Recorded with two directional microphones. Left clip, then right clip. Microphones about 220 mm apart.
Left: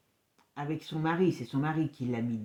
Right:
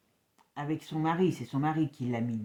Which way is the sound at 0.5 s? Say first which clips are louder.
Right 2 dB; 35° right (ahead or behind).